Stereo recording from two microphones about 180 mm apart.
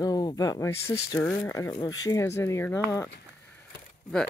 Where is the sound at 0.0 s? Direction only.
20° left (ahead or behind).